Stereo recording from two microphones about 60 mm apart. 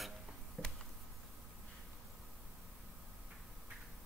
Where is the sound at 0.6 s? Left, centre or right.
Right.